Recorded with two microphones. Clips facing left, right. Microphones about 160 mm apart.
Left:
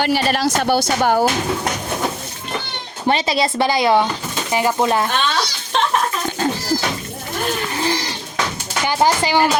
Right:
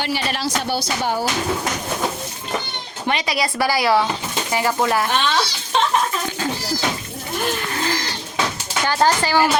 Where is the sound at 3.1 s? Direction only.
25° left (ahead or behind).